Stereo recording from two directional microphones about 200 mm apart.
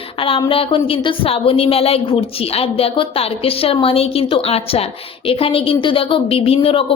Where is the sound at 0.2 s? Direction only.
25° left (ahead or behind).